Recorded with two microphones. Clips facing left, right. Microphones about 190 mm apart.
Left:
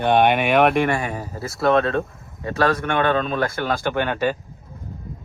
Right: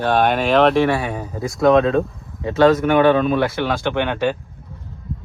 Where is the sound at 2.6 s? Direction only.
20° right (ahead or behind).